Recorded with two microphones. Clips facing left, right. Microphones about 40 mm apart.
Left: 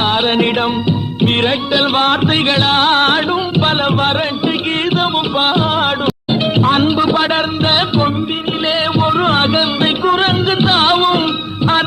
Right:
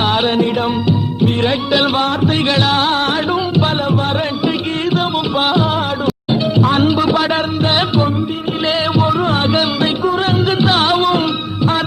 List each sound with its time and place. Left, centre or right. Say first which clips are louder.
0.3 s music: left 1 dB; left
2.5 s music: left 3 dB; left
4.9 s music: left 1 dB; left
6.9 s a man's voice: left 1 dB; centre
7.2 s music: left 1 dB; left
8.8 s music: left 2 dB; left
9.5 s music: left 1 dB; left
10.0 s music: left 2 dB; left